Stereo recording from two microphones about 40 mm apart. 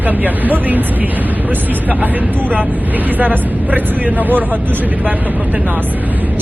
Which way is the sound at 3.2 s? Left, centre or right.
Right.